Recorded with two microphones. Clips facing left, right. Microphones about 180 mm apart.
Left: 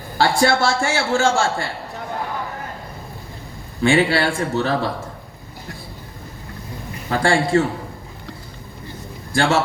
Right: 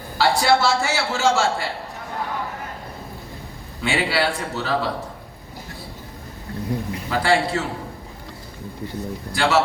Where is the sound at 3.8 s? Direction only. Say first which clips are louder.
Left 5 dB; 50° left (ahead or behind).